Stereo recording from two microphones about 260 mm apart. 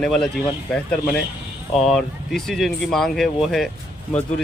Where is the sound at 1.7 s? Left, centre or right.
Centre.